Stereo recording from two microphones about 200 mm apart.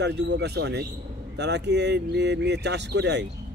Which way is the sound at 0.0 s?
55° right (ahead or behind).